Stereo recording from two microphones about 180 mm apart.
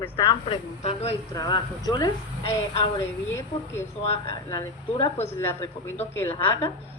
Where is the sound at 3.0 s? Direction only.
15° left (ahead or behind).